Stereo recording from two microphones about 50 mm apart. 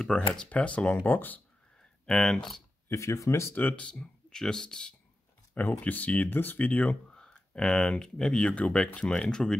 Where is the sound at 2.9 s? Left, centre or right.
Left.